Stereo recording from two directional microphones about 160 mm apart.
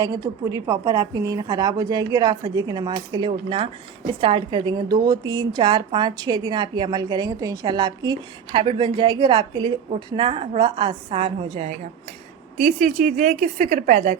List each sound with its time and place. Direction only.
0.0 s a woman's voice: 20° right (ahead or behind); by 14.2 s 50° right (ahead or behind)